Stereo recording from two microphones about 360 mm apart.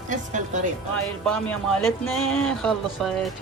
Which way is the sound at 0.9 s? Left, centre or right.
Centre.